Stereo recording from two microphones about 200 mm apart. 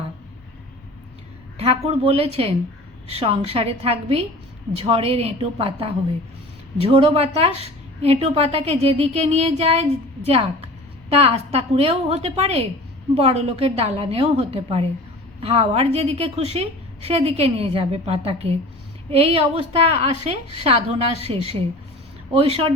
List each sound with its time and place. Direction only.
1.5 s a woman's voice: 30° right (ahead or behind)